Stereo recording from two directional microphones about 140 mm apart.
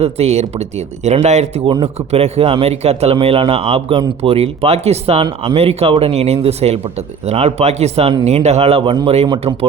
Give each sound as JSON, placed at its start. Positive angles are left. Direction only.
{"t": 0.0, "sound": "speech", "side_deg": -50}